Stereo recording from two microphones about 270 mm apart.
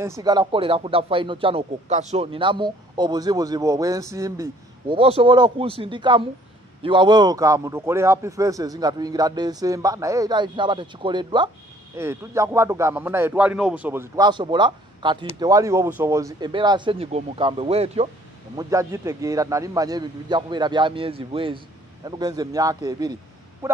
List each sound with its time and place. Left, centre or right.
0.0 s speech: centre
18.6 s speech: centre